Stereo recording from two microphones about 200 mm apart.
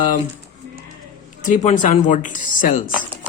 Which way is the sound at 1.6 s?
40° left (ahead or behind).